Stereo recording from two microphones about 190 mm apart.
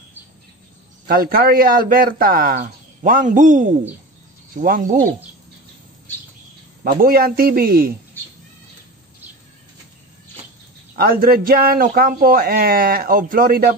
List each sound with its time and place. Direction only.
1.0 s a man's voice: 50° right (ahead or behind)
6.8 s a man's voice: 50° right (ahead or behind)
11.0 s a man's voice: 50° right (ahead or behind)